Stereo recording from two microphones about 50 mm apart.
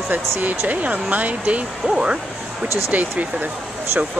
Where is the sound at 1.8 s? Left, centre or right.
Centre.